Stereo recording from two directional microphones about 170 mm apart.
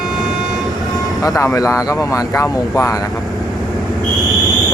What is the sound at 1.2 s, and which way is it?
Speech, 20° left (ahead or behind).